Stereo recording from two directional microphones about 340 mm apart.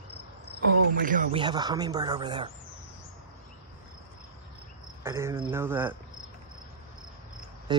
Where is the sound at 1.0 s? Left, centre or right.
Right.